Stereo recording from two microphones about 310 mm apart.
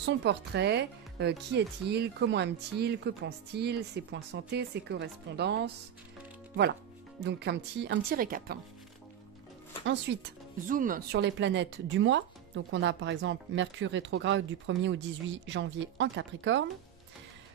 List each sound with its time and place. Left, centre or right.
0.0 s speech: right
7.2 s speech: right
10.1 s speech: right